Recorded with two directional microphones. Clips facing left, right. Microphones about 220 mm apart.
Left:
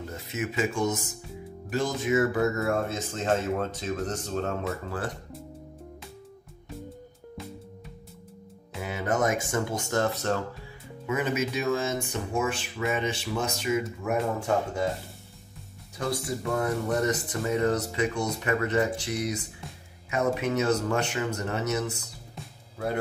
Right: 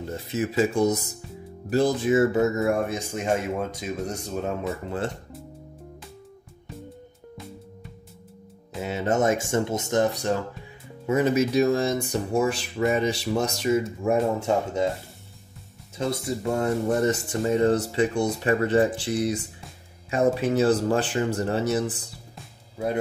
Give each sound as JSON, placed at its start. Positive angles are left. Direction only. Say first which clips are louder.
{"t": 0.0, "sound": "speech", "louder": "right 5 dB", "side_deg": -35}
{"t": 4.8, "sound": "speech", "louder": "right 4 dB", "side_deg": -25}
{"t": 8.8, "sound": "speech", "louder": "right 4 dB", "side_deg": -25}
{"t": 11.1, "sound": "speech", "louder": "right 6 dB", "side_deg": -35}
{"t": 16.0, "sound": "speech", "louder": "right 3 dB", "side_deg": -25}